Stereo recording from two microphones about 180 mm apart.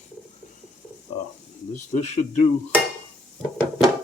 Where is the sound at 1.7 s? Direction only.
40° left (ahead or behind).